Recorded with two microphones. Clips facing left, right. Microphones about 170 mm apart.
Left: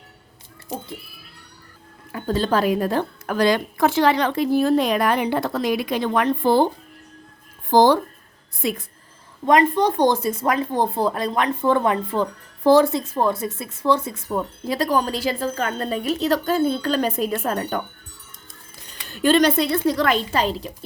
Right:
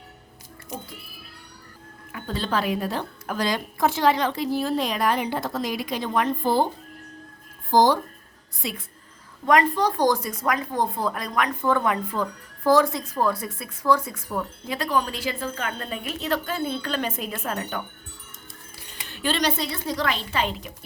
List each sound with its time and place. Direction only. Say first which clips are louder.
0.7 s speech: left 5 dB; 35° left (ahead or behind)
2.1 s a woman's voice: left 6 dB; 45° left (ahead or behind); by 6.7 s 70° left (ahead or behind)
7.7 s a woman's voice: left 4 dB; 65° left (ahead or behind)
8.6 s a woman's voice: left 8 dB; 55° left (ahead or behind)
9.5 s speech: left 3 dB; 20° left (ahead or behind); by 17.8 s 45° left (ahead or behind)
19.0 s a woman's voice: left 8 dB; 45° left (ahead or behind)
20.3 s speech: left 5 dB; 35° left (ahead or behind)